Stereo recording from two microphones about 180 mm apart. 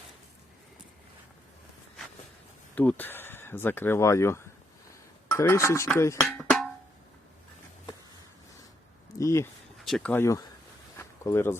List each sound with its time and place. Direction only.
2.7 s speech: 10° left (ahead or behind)
6.2 s music: centre (ahead or behind)
9.1 s speech: 15° left (ahead or behind)
9.7 s speech: centre (ahead or behind); by 10.5 s 20° left (ahead or behind)
10.9 s a sound: 15° left (ahead or behind)